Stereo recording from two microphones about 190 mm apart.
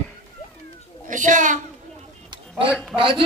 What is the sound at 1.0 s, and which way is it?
Speech, 40° right (ahead or behind).